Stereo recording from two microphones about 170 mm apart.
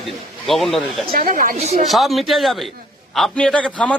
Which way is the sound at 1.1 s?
55° right (ahead or behind).